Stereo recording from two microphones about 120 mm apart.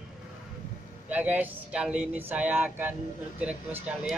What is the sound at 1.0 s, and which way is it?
Speech, 10° right (ahead or behind).